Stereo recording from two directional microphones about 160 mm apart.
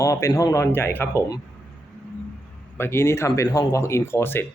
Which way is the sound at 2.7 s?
15° left (ahead or behind).